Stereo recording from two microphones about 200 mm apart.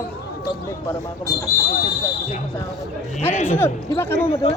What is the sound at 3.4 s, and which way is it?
Speech, 10° left (ahead or behind).